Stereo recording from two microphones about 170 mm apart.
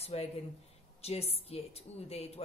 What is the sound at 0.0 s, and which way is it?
Speech, 35° left (ahead or behind).